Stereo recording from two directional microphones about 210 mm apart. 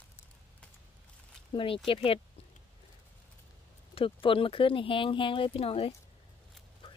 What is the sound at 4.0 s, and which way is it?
Speech, 25° left (ahead or behind).